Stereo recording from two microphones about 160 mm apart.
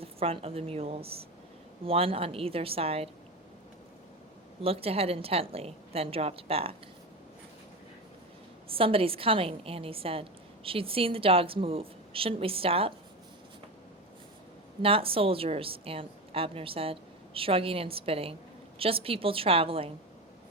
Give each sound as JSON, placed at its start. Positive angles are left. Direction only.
{"t": 0.0, "sound": "a woman's voice", "side_deg": -35}
{"t": 4.6, "sound": "a woman's voice", "side_deg": -35}
{"t": 8.7, "sound": "a woman's voice", "side_deg": -35}
{"t": 14.8, "sound": "a woman's voice", "side_deg": -35}